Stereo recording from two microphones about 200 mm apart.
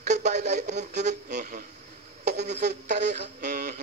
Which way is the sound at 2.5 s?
55° right (ahead or behind).